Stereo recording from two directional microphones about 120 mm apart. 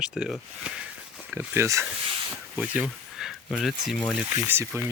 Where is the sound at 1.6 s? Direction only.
25° right (ahead or behind).